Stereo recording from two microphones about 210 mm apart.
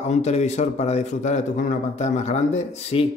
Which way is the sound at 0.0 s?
30° left (ahead or behind).